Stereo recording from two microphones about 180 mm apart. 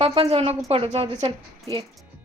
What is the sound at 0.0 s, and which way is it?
A woman's voice, 30° right (ahead or behind).